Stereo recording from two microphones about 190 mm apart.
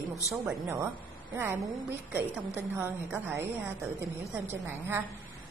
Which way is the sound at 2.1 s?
10° right (ahead or behind).